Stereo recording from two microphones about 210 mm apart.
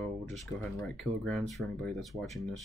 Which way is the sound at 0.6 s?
Centre (ahead or behind).